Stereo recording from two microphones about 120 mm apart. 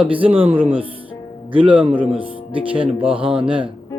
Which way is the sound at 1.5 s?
45° right (ahead or behind).